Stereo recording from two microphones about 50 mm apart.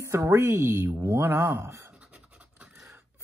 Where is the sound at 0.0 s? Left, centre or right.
Right.